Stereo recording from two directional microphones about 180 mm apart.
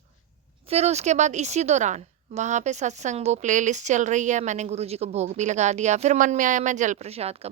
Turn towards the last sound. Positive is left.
turn(degrees=-35)  # may be behind; listen again after turning